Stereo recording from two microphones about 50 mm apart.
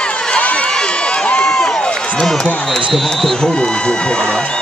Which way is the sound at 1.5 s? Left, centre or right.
Centre.